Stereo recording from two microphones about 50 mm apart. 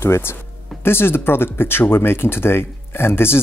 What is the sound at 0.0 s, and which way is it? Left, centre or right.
Speech, left.